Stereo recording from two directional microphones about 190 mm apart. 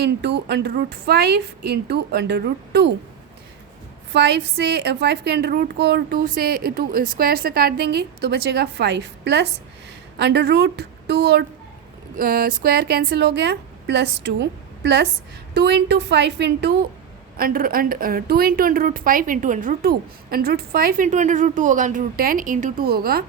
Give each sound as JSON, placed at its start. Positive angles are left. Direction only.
{"t": 0.2, "sound": "a woman's voice", "side_deg": -65}
{"t": 4.1, "sound": "a woman's voice", "side_deg": -60}
{"t": 17.3, "sound": "a woman's voice", "side_deg": -50}